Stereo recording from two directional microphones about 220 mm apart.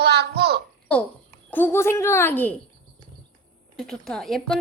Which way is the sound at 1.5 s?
10° left (ahead or behind).